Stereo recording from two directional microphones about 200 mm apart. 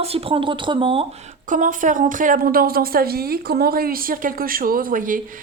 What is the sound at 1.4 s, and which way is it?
A woman's voice, 40° right (ahead or behind).